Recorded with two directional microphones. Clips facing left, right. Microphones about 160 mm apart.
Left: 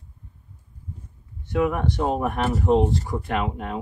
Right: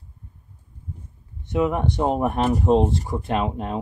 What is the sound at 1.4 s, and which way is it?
Speech, 20° right (ahead or behind).